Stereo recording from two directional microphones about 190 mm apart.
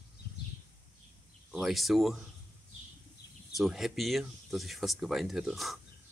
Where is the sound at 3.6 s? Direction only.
Centre (ahead or behind).